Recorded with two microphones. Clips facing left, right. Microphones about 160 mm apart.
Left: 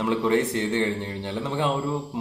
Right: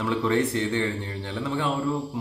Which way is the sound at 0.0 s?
20° left (ahead or behind).